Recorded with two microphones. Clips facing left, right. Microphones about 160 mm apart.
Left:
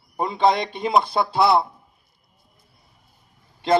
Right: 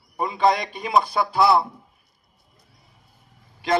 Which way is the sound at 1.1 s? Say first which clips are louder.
Left 1 dB; 30° left (ahead or behind).